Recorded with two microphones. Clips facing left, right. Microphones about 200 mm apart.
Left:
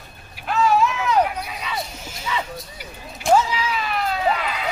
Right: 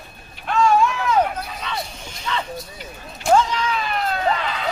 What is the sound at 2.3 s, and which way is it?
Speech, 10° left (ahead or behind).